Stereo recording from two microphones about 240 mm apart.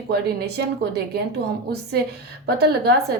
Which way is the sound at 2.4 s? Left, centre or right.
Right.